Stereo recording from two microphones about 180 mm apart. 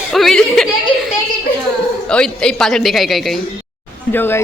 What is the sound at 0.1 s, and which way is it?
Speech, centre (ahead or behind).